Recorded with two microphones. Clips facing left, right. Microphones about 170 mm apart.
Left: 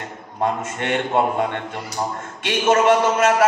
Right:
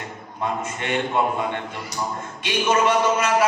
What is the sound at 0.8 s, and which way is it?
A man's voice, 55° left (ahead or behind).